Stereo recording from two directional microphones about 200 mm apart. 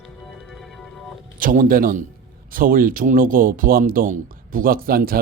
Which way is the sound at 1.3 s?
40° right (ahead or behind).